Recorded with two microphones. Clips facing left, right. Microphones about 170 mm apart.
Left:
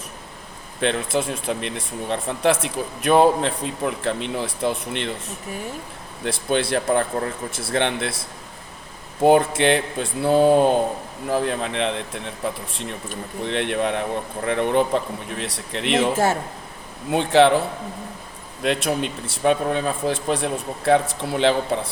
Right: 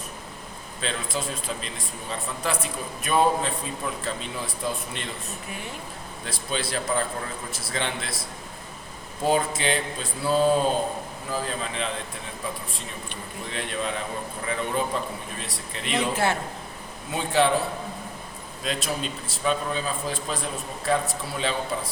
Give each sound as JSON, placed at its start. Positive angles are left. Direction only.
{"t": 0.8, "sound": "speech", "side_deg": 65}
{"t": 6.2, "sound": "a man's voice", "side_deg": 60}
{"t": 9.2, "sound": "a man's voice", "side_deg": 60}
{"t": 13.4, "sound": "a man's voice", "side_deg": 70}
{"t": 18.6, "sound": "a man's voice", "side_deg": 65}